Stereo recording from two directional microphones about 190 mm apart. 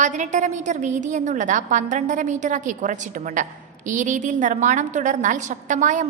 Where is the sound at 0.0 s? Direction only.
40° right (ahead or behind).